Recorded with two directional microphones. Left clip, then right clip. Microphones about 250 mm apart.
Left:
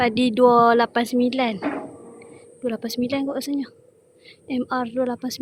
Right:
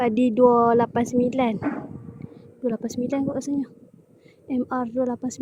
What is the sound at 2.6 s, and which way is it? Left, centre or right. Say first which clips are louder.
A woman's voice: left 1 dB; centre.